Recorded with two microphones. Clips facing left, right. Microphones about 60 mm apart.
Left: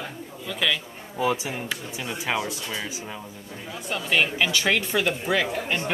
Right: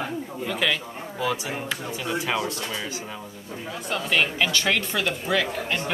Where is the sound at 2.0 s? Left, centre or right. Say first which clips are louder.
Right 1 dB; centre.